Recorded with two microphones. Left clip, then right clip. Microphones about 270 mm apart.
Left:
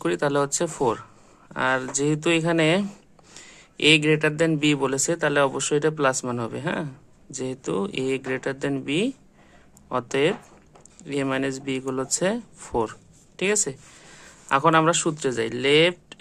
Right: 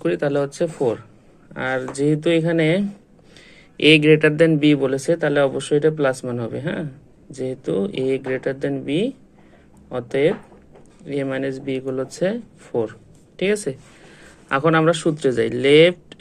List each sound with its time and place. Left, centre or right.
0.0 s speech: centre